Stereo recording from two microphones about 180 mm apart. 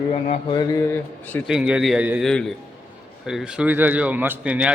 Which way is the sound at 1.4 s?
5° right (ahead or behind).